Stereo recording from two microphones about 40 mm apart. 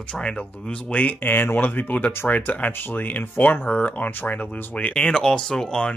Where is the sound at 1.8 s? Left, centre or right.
Left.